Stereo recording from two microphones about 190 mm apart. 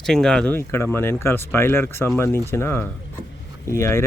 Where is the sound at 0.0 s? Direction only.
5° left (ahead or behind).